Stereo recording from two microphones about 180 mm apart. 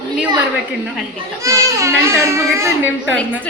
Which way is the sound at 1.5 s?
15° right (ahead or behind).